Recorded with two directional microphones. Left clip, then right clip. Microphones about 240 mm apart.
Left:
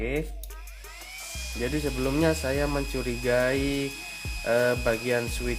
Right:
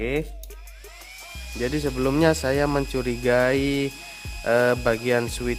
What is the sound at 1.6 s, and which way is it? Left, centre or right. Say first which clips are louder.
Speech: right 4 dB; right.